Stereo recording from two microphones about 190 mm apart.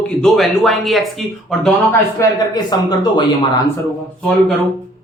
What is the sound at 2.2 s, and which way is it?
Speech, 20° left (ahead or behind).